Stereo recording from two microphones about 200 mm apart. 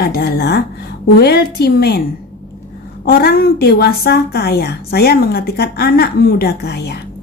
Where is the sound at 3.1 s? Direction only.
50° left (ahead or behind).